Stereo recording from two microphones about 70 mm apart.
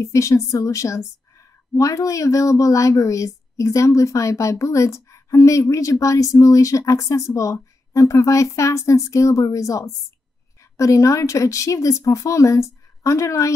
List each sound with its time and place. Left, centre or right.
0.0 s a woman's voice: left